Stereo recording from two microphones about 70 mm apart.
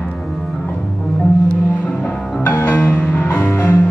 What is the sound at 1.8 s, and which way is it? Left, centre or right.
Music, centre.